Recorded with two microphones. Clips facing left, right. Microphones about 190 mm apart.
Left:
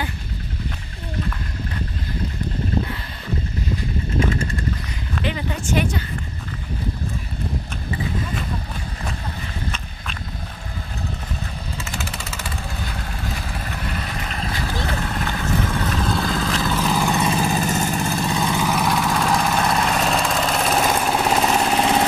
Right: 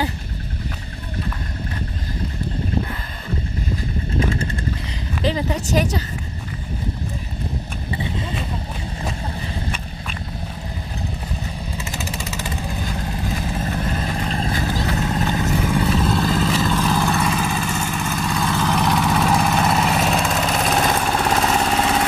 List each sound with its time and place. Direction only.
5.2 s speech: 35° right (ahead or behind)
11.8 s vehicle: 15° right (ahead or behind); by 17.2 s 10° left (ahead or behind)
17.2 s vehicle: 30° left (ahead or behind); by 21.7 s 5° left (ahead or behind)